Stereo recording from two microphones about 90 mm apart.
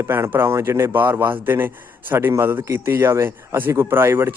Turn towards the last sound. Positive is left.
turn(degrees=-25)  # may be behind; listen again after turning